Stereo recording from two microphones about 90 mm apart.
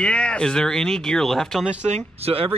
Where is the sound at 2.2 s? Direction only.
90° right.